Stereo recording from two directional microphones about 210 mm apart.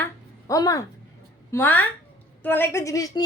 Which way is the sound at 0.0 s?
15° left (ahead or behind).